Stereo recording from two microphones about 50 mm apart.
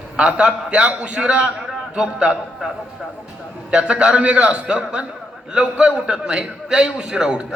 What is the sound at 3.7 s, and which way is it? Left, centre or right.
A man's voice, centre.